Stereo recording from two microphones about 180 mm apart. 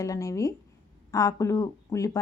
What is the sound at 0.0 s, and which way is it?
Speech, 20° left (ahead or behind).